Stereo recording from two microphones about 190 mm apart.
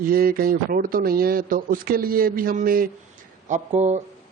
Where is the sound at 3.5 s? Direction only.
35° right (ahead or behind).